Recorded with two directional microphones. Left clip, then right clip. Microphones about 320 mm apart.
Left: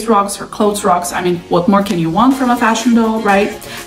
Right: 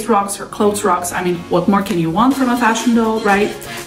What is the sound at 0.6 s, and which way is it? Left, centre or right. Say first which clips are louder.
A woman's voice: left 2 dB; centre.